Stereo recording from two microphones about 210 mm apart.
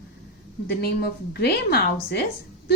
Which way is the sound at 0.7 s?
50° left (ahead or behind).